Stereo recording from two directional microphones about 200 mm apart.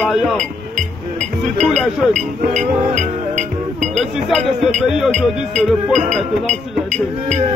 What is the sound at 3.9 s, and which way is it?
Speech, centre (ahead or behind).